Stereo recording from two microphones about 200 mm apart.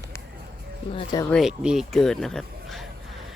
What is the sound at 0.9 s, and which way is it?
Speech, 20° left (ahead or behind).